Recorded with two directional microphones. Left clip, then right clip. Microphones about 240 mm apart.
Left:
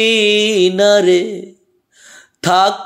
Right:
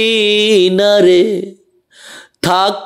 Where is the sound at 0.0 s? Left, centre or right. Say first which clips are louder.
Right 1 dB; right.